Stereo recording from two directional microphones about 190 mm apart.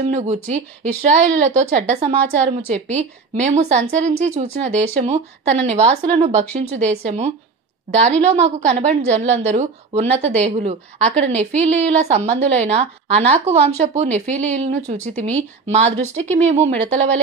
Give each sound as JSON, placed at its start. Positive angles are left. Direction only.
{"t": 0.0, "sound": "a woman's voice", "side_deg": -35}